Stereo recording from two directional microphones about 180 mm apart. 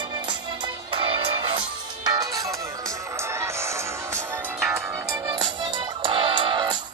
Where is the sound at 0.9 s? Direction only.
30° right (ahead or behind).